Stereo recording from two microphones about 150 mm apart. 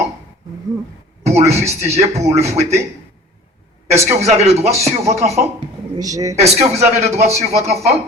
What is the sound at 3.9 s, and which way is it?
A man's voice, 45° right (ahead or behind).